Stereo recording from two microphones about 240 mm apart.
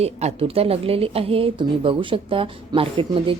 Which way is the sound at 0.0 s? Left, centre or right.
Right.